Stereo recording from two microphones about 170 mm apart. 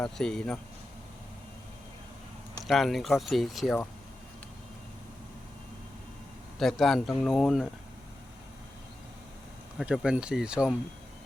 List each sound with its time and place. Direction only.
0.0 s speech: 5° left (ahead or behind)
2.6 s speech: centre (ahead or behind)
6.6 s speech: centre (ahead or behind)
9.7 s speech: 5° right (ahead or behind)